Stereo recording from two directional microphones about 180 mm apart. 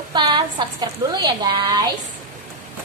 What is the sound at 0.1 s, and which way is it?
A woman's voice, 25° right (ahead or behind).